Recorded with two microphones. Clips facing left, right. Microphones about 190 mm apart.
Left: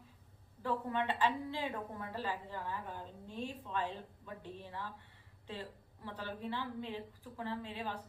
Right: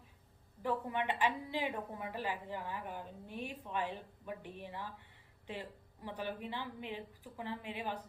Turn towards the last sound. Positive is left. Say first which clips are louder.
# even
turn(degrees=-15)  # may be behind; listen again after turning